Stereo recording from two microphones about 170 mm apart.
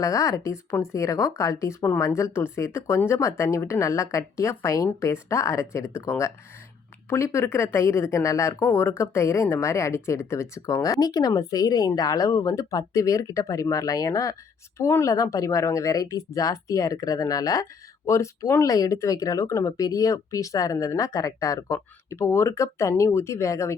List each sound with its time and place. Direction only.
0.0 s speech: 20° left (ahead or behind)